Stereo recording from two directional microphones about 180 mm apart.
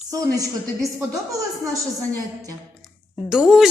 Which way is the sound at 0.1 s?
20° right (ahead or behind).